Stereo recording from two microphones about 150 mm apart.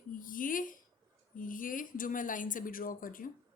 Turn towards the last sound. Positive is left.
turn(degrees=65)  # may be behind; listen again after turning